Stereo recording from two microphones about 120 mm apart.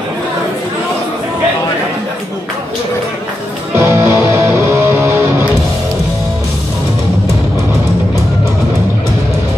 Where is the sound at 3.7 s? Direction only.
25° right (ahead or behind).